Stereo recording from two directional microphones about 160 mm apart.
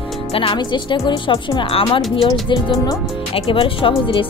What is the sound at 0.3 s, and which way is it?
Speech, 35° left (ahead or behind).